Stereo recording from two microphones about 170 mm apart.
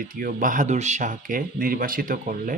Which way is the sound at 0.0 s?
55° right (ahead or behind).